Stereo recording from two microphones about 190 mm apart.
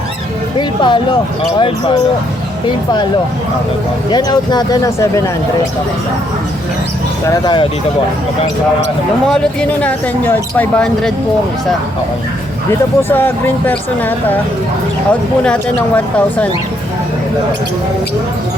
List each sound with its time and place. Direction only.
0.5 s speech: 25° left (ahead or behind)
4.1 s speech: 20° left (ahead or behind)
7.3 s speech: 25° left (ahead or behind)
9.3 s speech: 5° left (ahead or behind)
13.0 s speech: 10° left (ahead or behind)